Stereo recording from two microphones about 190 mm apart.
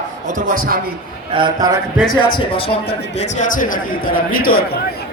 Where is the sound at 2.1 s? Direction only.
25° left (ahead or behind); by 4.7 s 50° left (ahead or behind).